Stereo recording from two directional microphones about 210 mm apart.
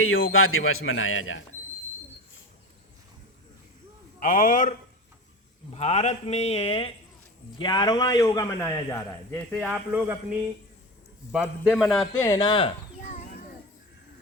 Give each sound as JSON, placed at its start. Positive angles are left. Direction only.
{"t": 0.0, "sound": "speech", "side_deg": 70}
{"t": 4.2, "sound": "speech", "side_deg": 40}
{"t": 5.7, "sound": "a man's voice", "side_deg": 30}
{"t": 9.5, "sound": "a man's voice", "side_deg": 0}
{"t": 12.2, "sound": "a sound", "side_deg": 15}